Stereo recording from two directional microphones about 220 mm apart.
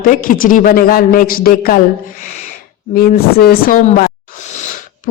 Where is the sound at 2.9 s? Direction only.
45° left (ahead or behind).